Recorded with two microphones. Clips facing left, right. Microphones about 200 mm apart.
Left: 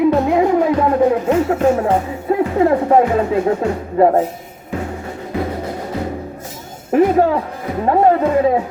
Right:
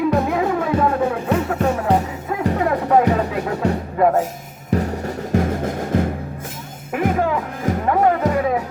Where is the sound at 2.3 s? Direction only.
30° left (ahead or behind).